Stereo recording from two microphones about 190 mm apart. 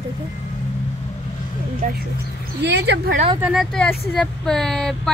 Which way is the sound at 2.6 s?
65° right (ahead or behind).